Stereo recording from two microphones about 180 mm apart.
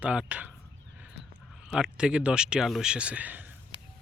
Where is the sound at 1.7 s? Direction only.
5° right (ahead or behind).